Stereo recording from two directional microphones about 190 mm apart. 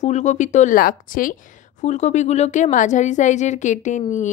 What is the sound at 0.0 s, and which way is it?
A woman's voice, 40° left (ahead or behind).